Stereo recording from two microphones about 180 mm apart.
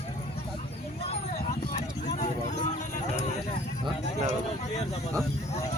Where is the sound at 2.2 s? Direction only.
40° left (ahead or behind).